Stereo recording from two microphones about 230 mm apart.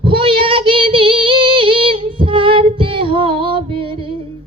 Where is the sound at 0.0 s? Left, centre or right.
Right.